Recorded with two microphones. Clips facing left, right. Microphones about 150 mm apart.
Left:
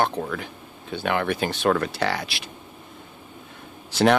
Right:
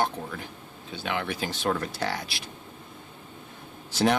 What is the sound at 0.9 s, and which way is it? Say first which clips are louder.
Speech: left 7 dB; 55° left (ahead or behind).